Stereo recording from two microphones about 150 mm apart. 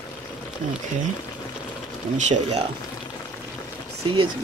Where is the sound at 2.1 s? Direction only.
50° right (ahead or behind).